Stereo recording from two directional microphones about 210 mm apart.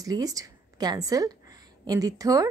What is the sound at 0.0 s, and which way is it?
A woman's voice, 15° right (ahead or behind).